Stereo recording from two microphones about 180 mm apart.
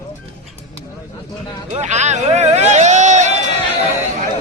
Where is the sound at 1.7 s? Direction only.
40° right (ahead or behind).